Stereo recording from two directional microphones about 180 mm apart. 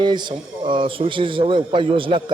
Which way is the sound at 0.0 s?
25° right (ahead or behind).